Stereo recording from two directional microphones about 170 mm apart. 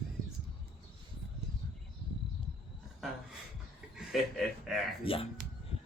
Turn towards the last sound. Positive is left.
turn(degrees=30)  # may be behind; listen again after turning